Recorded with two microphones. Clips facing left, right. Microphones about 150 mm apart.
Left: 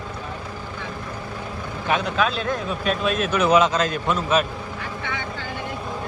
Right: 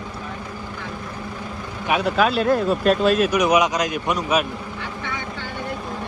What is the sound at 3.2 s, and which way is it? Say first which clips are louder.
A man's voice: even; 15° right (ahead or behind).